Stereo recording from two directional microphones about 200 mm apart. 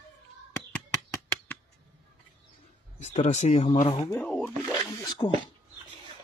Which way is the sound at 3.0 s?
35° left (ahead or behind).